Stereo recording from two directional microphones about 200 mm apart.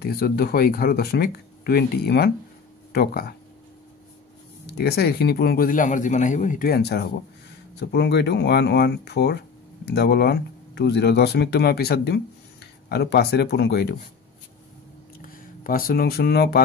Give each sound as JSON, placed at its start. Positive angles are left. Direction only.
{"t": 0.0, "sound": "a man's voice", "side_deg": 50}
{"t": 4.6, "sound": "a man's voice", "side_deg": 55}
{"t": 15.1, "sound": "speech", "side_deg": 45}